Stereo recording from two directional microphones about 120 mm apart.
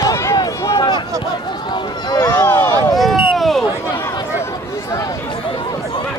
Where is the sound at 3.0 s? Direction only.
Centre (ahead or behind).